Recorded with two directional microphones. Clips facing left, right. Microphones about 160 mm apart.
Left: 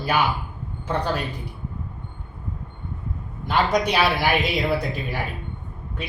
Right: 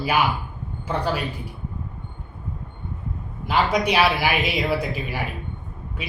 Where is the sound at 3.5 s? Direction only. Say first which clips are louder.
Even; 10° right (ahead or behind).